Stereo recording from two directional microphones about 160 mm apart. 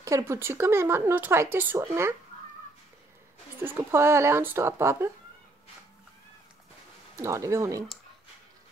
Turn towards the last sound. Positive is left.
turn(degrees=-20)  # may be behind; listen again after turning